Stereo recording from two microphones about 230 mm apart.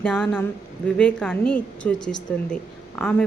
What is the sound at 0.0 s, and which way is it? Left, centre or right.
A woman's voice, centre.